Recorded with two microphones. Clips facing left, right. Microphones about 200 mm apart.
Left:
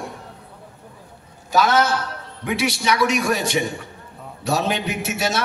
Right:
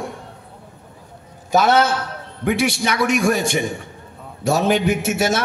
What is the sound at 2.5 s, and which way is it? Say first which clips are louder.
A man's voice: right 2 dB; 50° right (ahead or behind).